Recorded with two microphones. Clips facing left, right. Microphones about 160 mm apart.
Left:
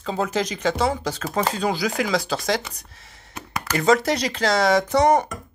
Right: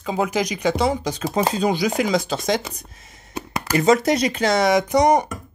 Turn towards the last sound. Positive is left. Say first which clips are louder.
# right 1 dB
turn(degrees=-15)  # may be behind; listen again after turning